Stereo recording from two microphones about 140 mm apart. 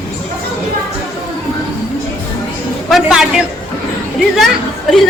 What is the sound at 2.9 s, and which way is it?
Speech, 5° right (ahead or behind).